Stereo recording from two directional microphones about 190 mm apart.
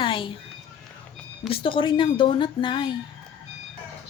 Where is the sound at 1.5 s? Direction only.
30° left (ahead or behind).